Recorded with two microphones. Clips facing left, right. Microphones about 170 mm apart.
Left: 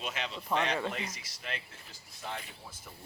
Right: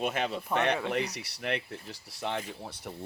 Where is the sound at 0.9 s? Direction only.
70° right (ahead or behind).